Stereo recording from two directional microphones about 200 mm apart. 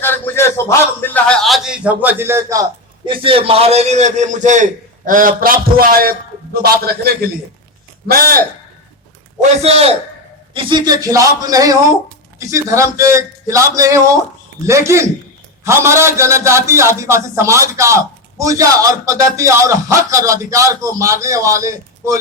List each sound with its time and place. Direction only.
0.0 s a man's voice: 10° left (ahead or behind); by 2.6 s 15° right (ahead or behind)
3.1 s a man's voice: 25° right (ahead or behind); by 8.4 s 45° right (ahead or behind)
9.4 s a man's voice: 30° right (ahead or behind); by 22.2 s 15° right (ahead or behind)